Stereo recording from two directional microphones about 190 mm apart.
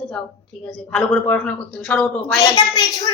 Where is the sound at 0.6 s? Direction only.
5° left (ahead or behind).